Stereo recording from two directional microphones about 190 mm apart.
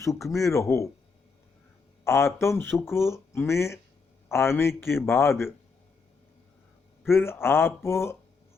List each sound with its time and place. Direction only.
0.0 s speech: 15° left (ahead or behind)
2.0 s speech: 15° left (ahead or behind)
7.1 s speech: 15° left (ahead or behind)